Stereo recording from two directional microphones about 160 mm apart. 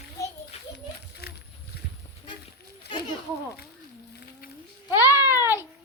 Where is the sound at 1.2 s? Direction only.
80° left.